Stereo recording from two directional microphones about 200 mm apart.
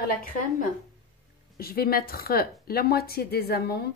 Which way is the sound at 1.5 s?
50° left (ahead or behind).